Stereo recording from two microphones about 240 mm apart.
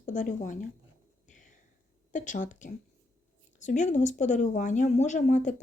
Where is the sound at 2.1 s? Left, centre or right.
Left.